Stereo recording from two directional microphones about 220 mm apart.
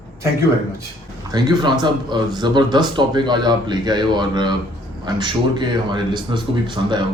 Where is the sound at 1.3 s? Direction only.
20° right (ahead or behind).